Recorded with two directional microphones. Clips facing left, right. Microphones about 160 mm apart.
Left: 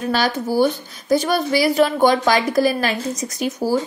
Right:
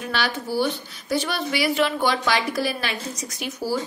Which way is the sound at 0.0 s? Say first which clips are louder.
Left 7 dB; 40° left (ahead or behind).